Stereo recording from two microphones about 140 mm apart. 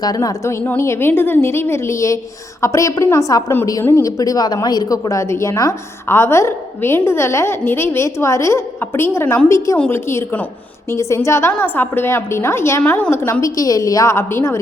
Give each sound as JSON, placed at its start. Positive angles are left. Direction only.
{"t": 0.0, "sound": "a woman's voice", "side_deg": 25}